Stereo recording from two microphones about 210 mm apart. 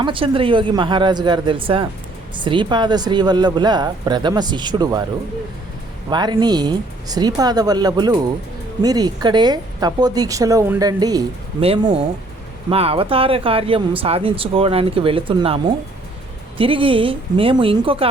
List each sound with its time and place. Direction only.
0.0 s speech: 25° right (ahead or behind)
6.1 s speech: 20° right (ahead or behind)